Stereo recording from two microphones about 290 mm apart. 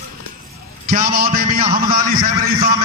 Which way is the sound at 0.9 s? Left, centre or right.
Right.